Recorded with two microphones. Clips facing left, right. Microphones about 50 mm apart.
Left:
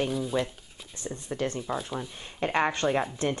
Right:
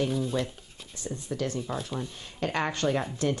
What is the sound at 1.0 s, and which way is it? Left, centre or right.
Speech, left.